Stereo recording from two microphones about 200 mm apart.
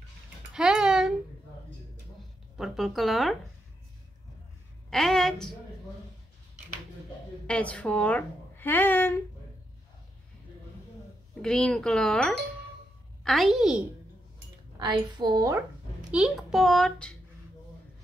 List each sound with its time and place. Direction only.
0.5 s a sound: 5° right (ahead or behind)
2.5 s a child's voice: centre (ahead or behind)
4.9 s a child's voice: centre (ahead or behind)
7.4 s speech: 5° left (ahead or behind)
11.4 s a child's voice: 5° left (ahead or behind)
14.8 s a woman's voice: 20° right (ahead or behind)
16.1 s a child's voice: 5° right (ahead or behind)